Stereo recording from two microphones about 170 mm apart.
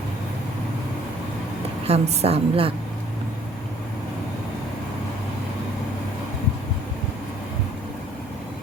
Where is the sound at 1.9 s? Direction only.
35° right (ahead or behind).